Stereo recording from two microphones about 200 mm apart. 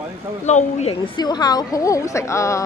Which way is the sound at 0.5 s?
35° left (ahead or behind).